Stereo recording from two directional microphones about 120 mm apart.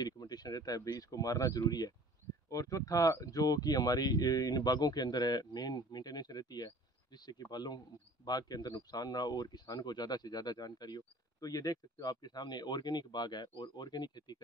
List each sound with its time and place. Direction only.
0.0 s speech: 35° left (ahead or behind)